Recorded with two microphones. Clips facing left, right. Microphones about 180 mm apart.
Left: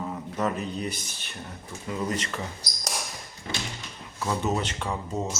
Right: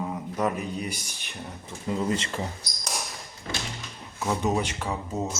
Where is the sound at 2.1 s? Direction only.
30° right (ahead or behind).